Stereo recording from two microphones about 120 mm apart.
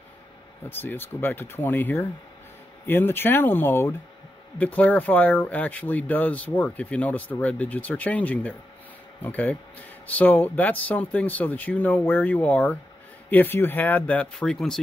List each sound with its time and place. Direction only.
0.7 s speech: 15° left (ahead or behind)